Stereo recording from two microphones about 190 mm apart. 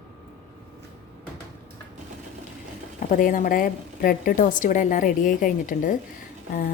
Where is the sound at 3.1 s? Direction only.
45° left (ahead or behind).